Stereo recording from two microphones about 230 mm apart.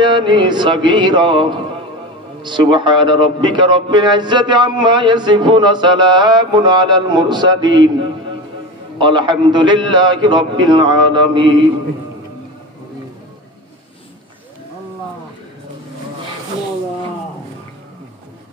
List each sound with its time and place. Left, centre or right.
0.0 s a man's voice: centre
8.9 s a man's voice: centre